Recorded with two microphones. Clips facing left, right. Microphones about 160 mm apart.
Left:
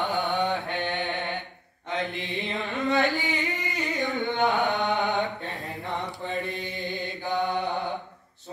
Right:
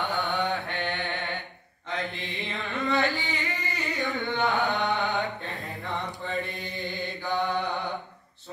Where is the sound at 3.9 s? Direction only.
20° left (ahead or behind).